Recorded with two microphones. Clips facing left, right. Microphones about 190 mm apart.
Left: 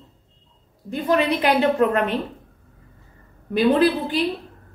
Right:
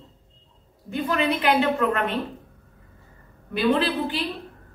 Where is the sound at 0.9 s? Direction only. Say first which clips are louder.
Left 4 dB; 35° left (ahead or behind).